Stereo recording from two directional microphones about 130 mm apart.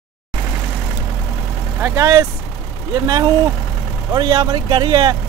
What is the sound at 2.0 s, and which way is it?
Speech, 25° right (ahead or behind).